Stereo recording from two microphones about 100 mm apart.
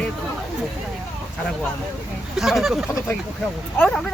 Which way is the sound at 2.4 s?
Centre (ahead or behind).